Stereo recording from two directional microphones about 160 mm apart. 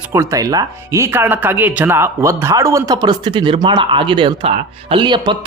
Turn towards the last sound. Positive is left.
turn(degrees=-30)  # may be behind; listen again after turning